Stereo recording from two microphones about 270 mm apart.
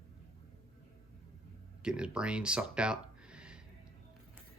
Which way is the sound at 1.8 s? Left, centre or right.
Centre.